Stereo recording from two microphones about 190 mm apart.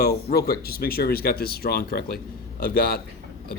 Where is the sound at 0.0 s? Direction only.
55° left (ahead or behind).